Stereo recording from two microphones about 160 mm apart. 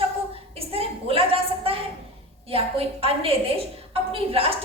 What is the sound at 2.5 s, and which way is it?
A woman's voice, 35° right (ahead or behind).